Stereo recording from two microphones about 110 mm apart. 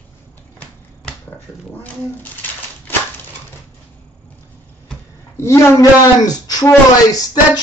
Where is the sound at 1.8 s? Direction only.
15° left (ahead or behind).